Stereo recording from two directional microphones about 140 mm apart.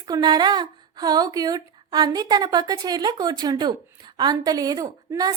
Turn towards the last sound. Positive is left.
turn(degrees=-30)  # may be behind; listen again after turning